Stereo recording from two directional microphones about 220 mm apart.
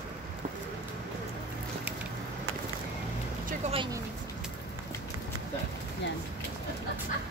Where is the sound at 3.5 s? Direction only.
25° right (ahead or behind).